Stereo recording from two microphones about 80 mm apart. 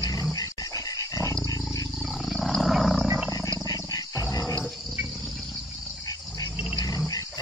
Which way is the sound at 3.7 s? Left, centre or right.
Left.